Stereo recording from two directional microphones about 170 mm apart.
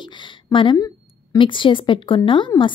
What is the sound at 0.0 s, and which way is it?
A woman's voice, 30° left (ahead or behind).